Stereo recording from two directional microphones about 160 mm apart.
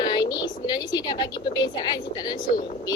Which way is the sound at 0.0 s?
25° left (ahead or behind).